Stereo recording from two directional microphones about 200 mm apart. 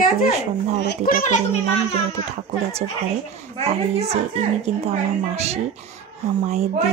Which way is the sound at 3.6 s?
30° right (ahead or behind).